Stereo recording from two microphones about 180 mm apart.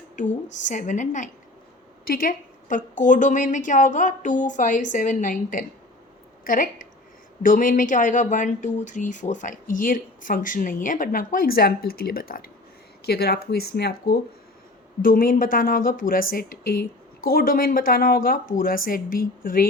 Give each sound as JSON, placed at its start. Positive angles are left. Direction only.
{"t": 0.4, "sound": "a woman's voice", "side_deg": 45}
{"t": 15.0, "sound": "speech", "side_deg": 50}